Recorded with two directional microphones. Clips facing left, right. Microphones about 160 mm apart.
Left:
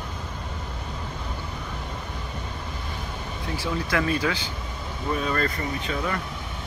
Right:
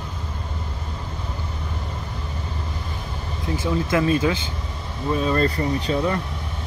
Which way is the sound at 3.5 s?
20° right (ahead or behind).